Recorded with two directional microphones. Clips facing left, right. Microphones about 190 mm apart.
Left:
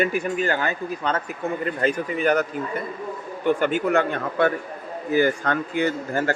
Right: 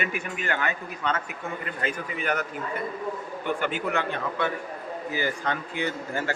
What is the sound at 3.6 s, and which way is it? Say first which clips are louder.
A man's voice: left 6 dB; 45° left (ahead or behind).